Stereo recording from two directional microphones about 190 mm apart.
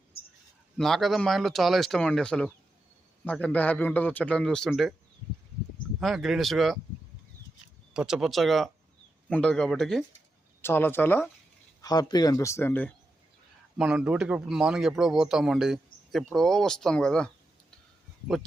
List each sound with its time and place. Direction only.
0.1 s a sound: 55° left (ahead or behind)
0.8 s a man's voice: centre (ahead or behind)
6.0 s speech: centre (ahead or behind)
7.9 s a man's voice: centre (ahead or behind)
13.7 s speech: 5° right (ahead or behind)